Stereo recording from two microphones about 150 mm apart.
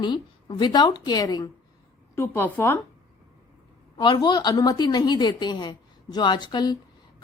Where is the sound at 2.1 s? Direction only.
15° left (ahead or behind).